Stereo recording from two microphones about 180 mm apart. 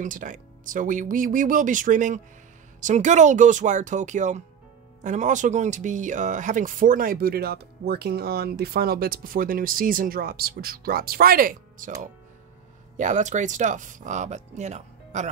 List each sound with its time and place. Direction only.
0.0 s speech: 45° right (ahead or behind)
12.9 s speech: 45° right (ahead or behind)